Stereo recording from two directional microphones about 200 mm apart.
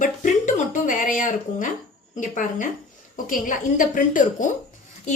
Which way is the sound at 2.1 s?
40° left (ahead or behind).